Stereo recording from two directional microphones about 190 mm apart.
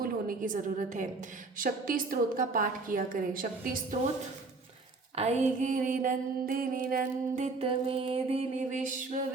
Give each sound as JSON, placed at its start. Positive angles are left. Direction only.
{"t": 0.0, "sound": "a woman's voice", "side_deg": -45}
{"t": 5.1, "sound": "mantra", "side_deg": -35}